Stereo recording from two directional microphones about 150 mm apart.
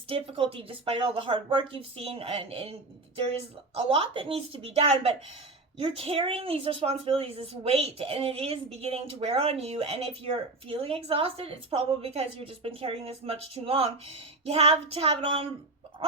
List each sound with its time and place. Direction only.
0.1 s a woman's voice: 35° right (ahead or behind)
3.8 s a woman's voice: 35° right (ahead or behind)